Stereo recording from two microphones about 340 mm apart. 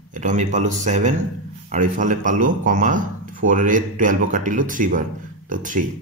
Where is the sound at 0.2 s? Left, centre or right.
Right.